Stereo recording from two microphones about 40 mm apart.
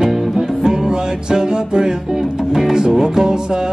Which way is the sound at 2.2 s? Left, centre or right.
Centre.